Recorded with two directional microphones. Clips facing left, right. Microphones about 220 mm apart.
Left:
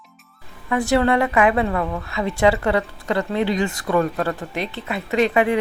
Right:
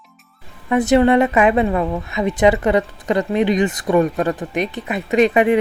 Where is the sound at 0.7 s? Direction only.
20° right (ahead or behind).